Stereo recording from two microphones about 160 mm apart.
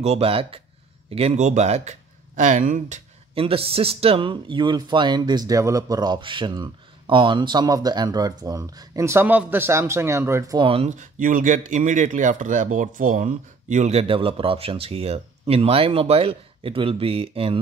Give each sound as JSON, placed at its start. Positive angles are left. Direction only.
{"t": 0.0, "sound": "speech", "side_deg": -40}
{"t": 3.3, "sound": "speech", "side_deg": -35}
{"t": 10.7, "sound": "speech", "side_deg": -45}